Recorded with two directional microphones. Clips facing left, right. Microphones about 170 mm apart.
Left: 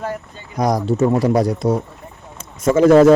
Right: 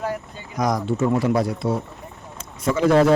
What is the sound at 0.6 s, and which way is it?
A man's voice, 35° left (ahead or behind).